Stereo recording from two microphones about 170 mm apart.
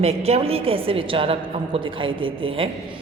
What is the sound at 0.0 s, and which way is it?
A woman's voice, 35° right (ahead or behind).